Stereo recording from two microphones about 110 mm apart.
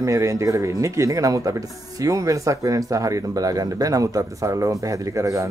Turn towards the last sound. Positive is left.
turn(degrees=-30)  # may be behind; listen again after turning